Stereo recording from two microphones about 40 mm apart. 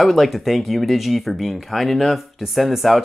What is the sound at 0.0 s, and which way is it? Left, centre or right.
Speech, centre.